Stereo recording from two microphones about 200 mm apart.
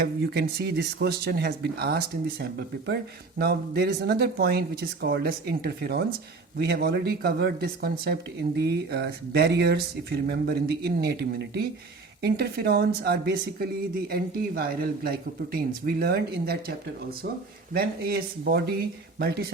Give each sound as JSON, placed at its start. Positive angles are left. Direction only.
{"t": 0.0, "sound": "speech", "side_deg": -55}
{"t": 17.7, "sound": "speech", "side_deg": -50}